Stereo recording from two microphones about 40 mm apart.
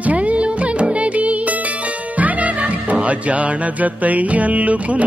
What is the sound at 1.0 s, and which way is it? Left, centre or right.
Music, right.